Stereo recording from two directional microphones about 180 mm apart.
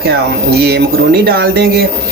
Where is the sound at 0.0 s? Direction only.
65° right (ahead or behind).